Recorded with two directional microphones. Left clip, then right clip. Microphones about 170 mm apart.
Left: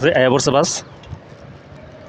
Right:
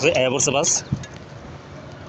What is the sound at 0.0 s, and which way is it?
Speech, 35° left (ahead or behind).